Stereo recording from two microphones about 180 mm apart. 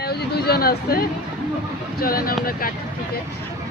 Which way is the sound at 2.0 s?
55° left (ahead or behind).